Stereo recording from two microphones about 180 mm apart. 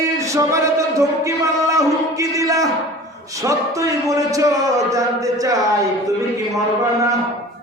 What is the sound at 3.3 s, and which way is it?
A man's voice, 20° right (ahead or behind).